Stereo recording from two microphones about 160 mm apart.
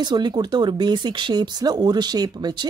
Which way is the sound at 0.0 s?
25° right (ahead or behind).